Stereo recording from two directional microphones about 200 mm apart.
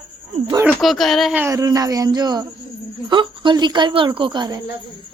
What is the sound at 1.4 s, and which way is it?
A woman's voice, 15° right (ahead or behind).